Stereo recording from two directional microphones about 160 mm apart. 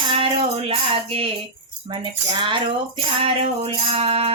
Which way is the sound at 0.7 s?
35° right (ahead or behind).